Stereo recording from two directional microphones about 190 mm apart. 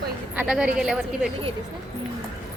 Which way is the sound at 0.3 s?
5° right (ahead or behind).